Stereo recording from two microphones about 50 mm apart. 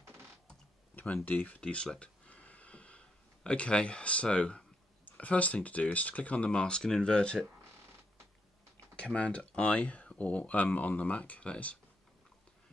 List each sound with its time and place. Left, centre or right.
0.9 s speech: left
1.6 s speech: centre
8.9 s speech: left